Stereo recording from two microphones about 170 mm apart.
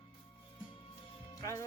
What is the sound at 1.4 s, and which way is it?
Speech, 15° left (ahead or behind).